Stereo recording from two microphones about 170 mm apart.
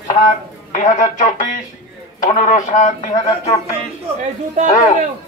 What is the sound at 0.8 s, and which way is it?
Speech, 45° left (ahead or behind).